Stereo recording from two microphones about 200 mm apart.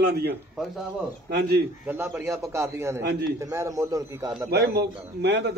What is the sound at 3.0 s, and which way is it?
Speech, 55° right (ahead or behind).